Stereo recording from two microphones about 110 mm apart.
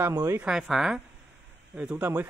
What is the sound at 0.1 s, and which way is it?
Speech, 35° right (ahead or behind).